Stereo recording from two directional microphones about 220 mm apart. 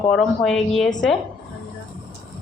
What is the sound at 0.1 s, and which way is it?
Frying, centre (ahead or behind).